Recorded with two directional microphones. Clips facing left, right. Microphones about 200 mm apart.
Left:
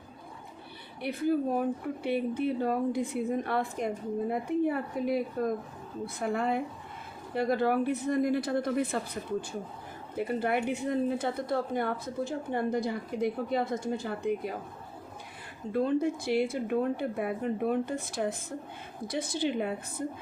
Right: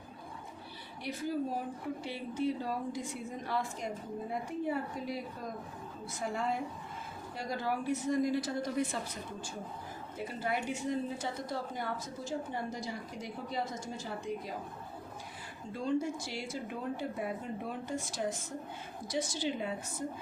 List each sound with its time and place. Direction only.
1.0 s speech: 60° left (ahead or behind)
10.2 s speech: 60° left (ahead or behind)
15.7 s speech: 60° left (ahead or behind)